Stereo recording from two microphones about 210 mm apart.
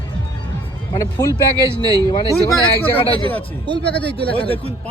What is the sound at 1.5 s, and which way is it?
Speech, 15° right (ahead or behind).